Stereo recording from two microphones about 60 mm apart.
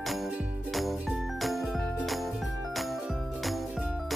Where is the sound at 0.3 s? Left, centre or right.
Centre.